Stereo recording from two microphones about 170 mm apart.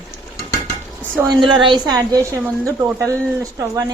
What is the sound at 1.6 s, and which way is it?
Speech, 25° right (ahead or behind).